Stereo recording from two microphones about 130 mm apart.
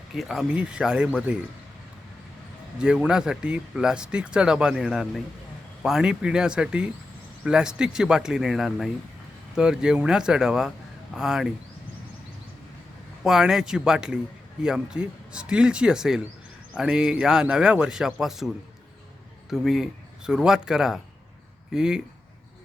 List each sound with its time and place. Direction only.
0.1 s speech: centre (ahead or behind)
2.7 s a man's voice: 5° right (ahead or behind)
13.2 s a man's voice: 5° right (ahead or behind)